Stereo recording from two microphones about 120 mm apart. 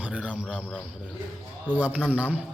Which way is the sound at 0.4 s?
5° left (ahead or behind).